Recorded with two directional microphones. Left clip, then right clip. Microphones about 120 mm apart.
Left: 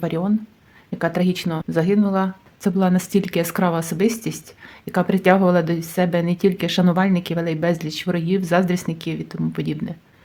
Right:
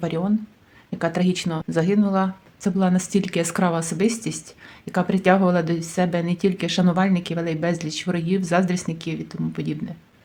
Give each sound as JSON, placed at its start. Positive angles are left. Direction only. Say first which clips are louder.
{"t": 0.0, "sound": "speech", "louder": "left 2 dB", "side_deg": 15}